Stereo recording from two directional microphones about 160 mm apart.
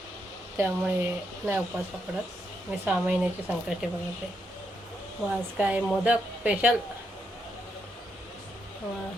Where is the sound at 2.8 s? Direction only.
10° right (ahead or behind).